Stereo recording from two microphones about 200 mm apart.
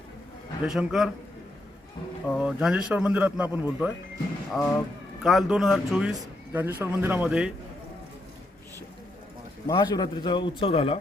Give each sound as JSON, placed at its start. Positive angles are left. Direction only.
{"t": 0.6, "sound": "a man's voice", "side_deg": -5}
{"t": 2.4, "sound": "a man's voice", "side_deg": -5}
{"t": 9.6, "sound": "a man's voice", "side_deg": 20}